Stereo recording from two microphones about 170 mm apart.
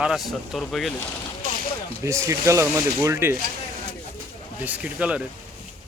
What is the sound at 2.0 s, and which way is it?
Speech, 15° right (ahead or behind).